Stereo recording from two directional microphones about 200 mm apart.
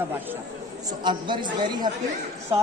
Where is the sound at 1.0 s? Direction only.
25° right (ahead or behind).